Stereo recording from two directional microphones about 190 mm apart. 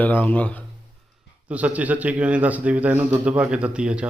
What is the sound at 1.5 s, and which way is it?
A man's voice, 5° right (ahead or behind).